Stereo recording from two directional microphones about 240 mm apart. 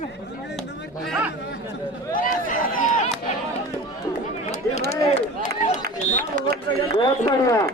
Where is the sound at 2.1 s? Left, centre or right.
Left.